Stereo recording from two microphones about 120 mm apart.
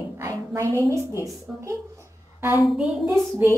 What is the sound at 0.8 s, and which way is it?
Speech, 25° right (ahead or behind).